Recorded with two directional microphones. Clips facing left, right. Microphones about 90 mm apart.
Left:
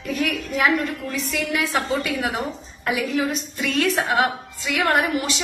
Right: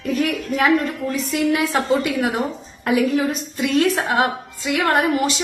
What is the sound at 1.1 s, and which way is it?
A woman's voice, 30° right (ahead or behind).